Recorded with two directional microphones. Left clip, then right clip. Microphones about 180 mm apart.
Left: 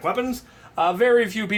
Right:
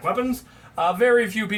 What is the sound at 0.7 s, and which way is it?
Speech, 35° left (ahead or behind).